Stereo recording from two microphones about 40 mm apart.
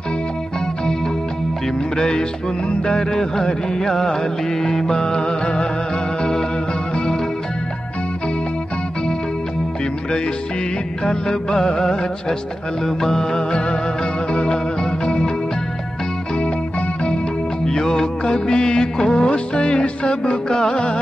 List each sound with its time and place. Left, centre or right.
2.0 s music: centre
11.1 s music: centre
17.6 s music of bollywood: centre